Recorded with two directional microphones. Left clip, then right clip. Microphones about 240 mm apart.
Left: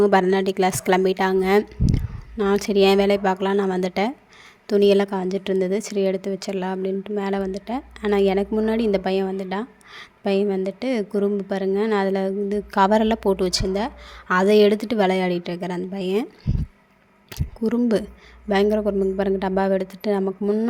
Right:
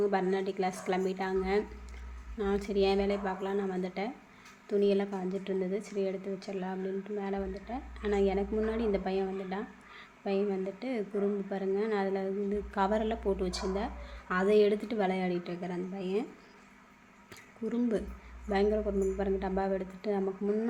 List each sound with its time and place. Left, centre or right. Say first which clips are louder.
0.0 s a woman's voice: left 12 dB; left
17.3 s a woman's voice: left 12 dB; left